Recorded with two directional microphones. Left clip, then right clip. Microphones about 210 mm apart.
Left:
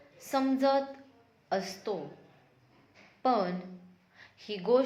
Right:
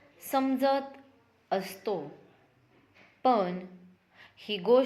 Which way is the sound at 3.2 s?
30° right (ahead or behind).